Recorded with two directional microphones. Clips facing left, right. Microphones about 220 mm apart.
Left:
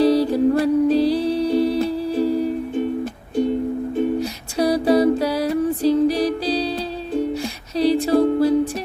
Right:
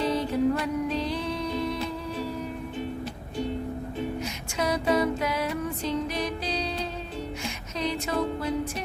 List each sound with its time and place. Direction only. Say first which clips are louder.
0.0 s music: left 9 dB; 35° left (ahead or behind)
4.2 s music: left 9 dB; 35° left (ahead or behind)
7.8 s music: left 12 dB; 35° left (ahead or behind)